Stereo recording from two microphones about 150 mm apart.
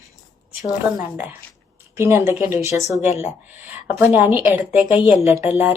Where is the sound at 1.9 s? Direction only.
15° right (ahead or behind).